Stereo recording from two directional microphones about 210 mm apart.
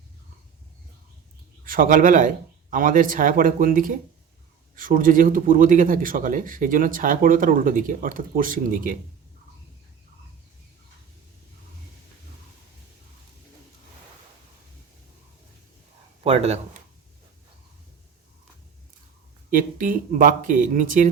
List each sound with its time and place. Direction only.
1.6 s speech: 40° right (ahead or behind)
16.2 s speech: 30° right (ahead or behind)
19.5 s speech: 40° right (ahead or behind)